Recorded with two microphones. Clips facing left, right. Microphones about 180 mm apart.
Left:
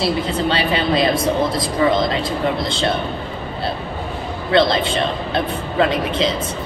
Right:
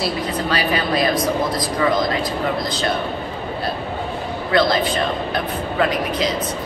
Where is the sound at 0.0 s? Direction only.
25° left (ahead or behind).